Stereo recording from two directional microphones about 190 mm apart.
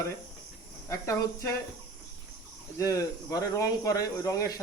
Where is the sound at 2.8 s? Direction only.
15° left (ahead or behind).